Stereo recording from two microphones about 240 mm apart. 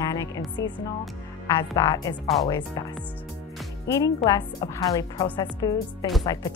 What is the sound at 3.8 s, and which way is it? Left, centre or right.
A woman's voice, centre.